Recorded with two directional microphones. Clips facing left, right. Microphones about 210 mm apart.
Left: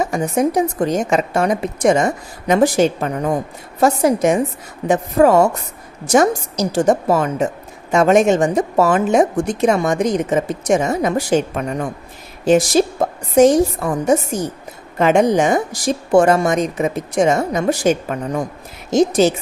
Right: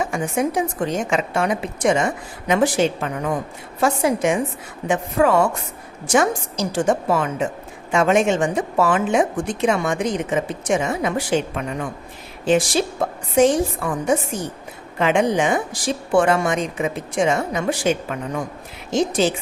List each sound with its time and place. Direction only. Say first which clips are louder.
0.0 s a woman's voice: left 4 dB; 40° left (ahead or behind)